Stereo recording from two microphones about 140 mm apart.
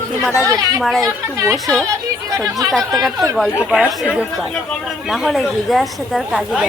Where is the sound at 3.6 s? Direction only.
5° right (ahead or behind).